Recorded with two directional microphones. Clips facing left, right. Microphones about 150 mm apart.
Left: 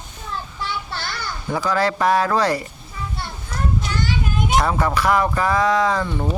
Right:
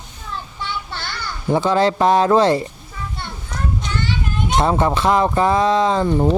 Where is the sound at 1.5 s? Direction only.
25° right (ahead or behind).